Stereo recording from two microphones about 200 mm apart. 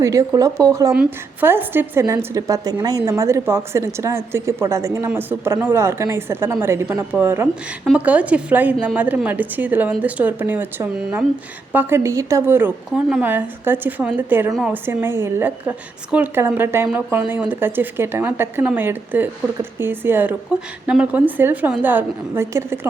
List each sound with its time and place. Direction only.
0.0 s a woman's voice: 15° right (ahead or behind)